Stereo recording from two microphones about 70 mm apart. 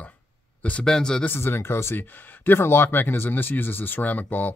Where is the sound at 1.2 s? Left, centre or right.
Left.